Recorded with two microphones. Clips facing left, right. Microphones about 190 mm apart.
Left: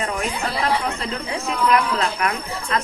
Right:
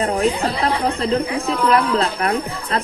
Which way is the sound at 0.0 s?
35° right (ahead or behind).